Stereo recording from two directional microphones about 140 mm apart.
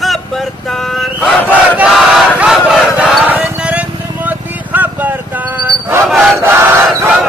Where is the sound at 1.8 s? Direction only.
5° right (ahead or behind).